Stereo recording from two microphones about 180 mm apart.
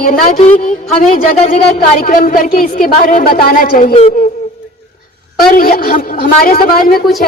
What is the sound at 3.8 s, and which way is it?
Speech, 35° left (ahead or behind).